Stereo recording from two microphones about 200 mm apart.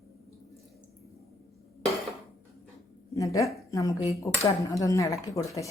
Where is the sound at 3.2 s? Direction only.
15° left (ahead or behind).